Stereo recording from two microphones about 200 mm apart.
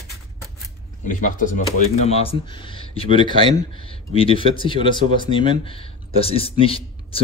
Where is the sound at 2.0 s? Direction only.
30° left (ahead or behind).